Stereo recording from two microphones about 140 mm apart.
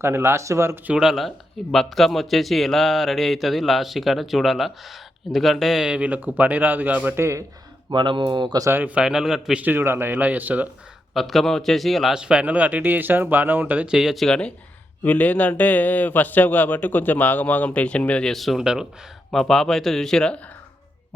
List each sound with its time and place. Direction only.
0.0 s speech: 20° right (ahead or behind)
0.9 s speech: centre (ahead or behind); by 7.4 s 20° right (ahead or behind)
7.9 s speech: 35° right (ahead or behind)
8.6 s a man's voice: 15° right (ahead or behind)
11.1 s a man's voice: centre (ahead or behind)